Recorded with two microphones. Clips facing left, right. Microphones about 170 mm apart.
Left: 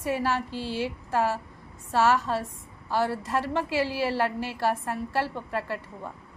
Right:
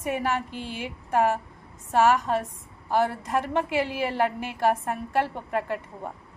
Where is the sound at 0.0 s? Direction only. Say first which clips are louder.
Even; 20° right (ahead or behind).